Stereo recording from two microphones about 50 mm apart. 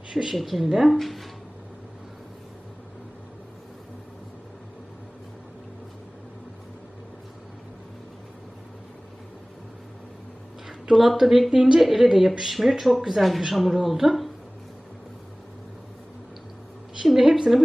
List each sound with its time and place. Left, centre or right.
0.1 s speech: centre
10.7 s speech: centre
11.5 s speech: centre
11.8 s speech: centre
17.1 s a sound: centre